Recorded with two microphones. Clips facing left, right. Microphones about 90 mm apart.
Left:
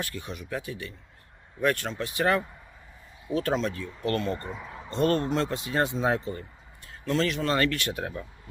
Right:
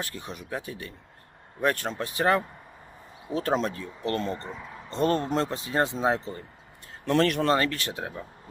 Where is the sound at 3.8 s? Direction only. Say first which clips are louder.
Left 1 dB; 20° right (ahead or behind).